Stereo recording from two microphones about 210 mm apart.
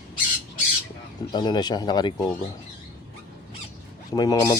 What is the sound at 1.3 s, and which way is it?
Speech, 20° left (ahead or behind).